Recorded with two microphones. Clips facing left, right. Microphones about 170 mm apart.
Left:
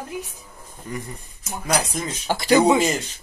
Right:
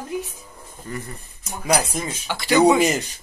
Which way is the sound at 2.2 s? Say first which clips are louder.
Left 5 dB; 45° left (ahead or behind).